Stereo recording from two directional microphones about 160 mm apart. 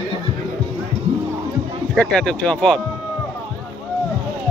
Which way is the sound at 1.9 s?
5° left (ahead or behind).